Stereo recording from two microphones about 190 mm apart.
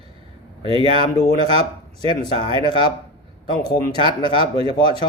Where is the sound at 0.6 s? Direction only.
30° right (ahead or behind).